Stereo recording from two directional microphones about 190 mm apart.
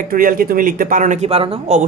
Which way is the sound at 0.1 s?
50° right (ahead or behind).